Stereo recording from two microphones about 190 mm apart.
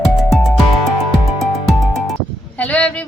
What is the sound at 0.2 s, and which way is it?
Music, centre (ahead or behind).